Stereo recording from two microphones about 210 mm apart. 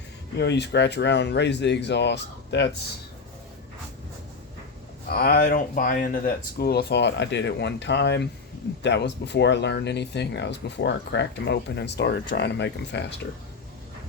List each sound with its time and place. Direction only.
0.3 s speech: 55° left (ahead or behind)
5.0 s speech: 45° left (ahead or behind)